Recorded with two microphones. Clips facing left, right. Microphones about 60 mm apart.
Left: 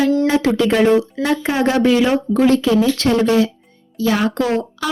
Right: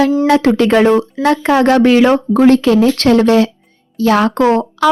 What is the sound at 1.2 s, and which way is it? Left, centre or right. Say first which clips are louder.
Speech: right 10 dB; right.